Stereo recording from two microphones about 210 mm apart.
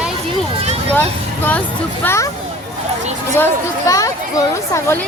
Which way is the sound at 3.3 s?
15° left (ahead or behind).